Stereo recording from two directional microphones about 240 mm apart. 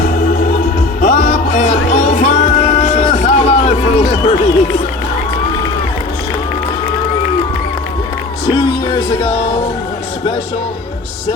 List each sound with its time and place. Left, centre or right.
0.0 s music: left
8.4 s music: centre